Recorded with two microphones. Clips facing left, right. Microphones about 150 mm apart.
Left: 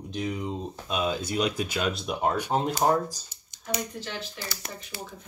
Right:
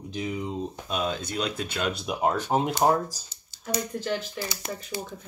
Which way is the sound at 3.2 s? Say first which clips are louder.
Right 1 dB; 20° left (ahead or behind).